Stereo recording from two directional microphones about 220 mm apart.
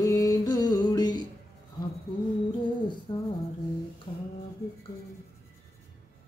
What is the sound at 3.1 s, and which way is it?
Music, 20° left (ahead or behind).